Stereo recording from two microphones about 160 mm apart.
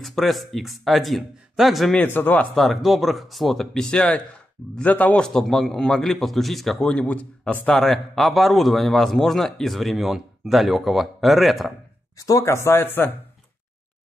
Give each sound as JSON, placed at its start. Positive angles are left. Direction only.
{"t": 0.0, "sound": "a man's voice", "side_deg": 0}
{"t": 12.2, "sound": "speech", "side_deg": 20}